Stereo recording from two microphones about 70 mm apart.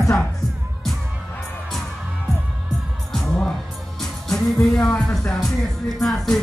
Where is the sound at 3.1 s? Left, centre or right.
Centre.